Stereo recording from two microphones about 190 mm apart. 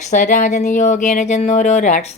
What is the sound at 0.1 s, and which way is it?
Speech, 40° left (ahead or behind).